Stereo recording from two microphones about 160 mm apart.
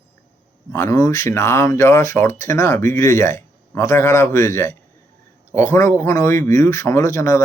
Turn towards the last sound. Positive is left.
turn(degrees=20)  # may be behind; listen again after turning